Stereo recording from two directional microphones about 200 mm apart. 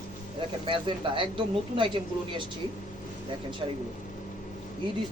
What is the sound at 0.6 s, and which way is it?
Speech, 25° right (ahead or behind).